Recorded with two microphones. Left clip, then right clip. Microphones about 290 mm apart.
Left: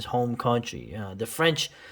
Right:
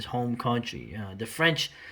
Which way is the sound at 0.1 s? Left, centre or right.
Centre.